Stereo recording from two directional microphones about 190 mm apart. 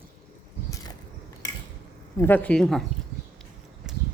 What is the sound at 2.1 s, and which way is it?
Speech, 10° left (ahead or behind).